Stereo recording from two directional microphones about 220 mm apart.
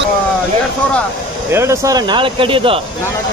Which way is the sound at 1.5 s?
10° right (ahead or behind).